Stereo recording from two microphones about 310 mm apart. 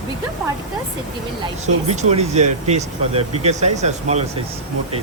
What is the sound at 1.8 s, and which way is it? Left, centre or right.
Speech, right.